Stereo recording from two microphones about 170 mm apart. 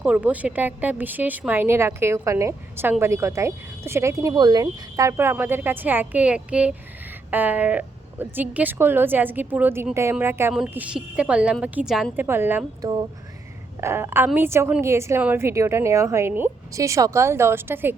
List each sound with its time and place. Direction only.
0.0 s speech: 10° right (ahead or behind)